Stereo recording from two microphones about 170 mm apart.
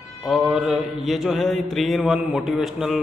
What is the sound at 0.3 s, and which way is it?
Mantra, centre (ahead or behind).